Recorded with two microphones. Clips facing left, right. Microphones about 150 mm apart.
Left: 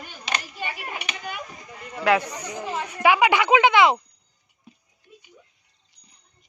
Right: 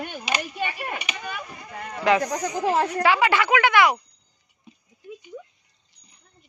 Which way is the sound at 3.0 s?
15° left (ahead or behind).